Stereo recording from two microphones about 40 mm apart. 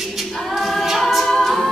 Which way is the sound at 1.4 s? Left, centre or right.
Centre.